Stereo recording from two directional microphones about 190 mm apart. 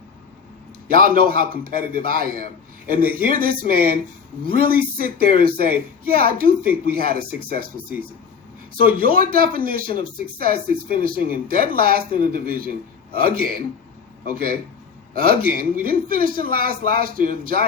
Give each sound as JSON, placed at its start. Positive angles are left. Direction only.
{"t": 0.9, "sound": "speech", "side_deg": -50}
{"t": 9.0, "sound": "speech", "side_deg": -50}